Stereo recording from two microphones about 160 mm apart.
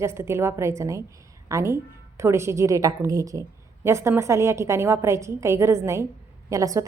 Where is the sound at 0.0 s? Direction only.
15° right (ahead or behind).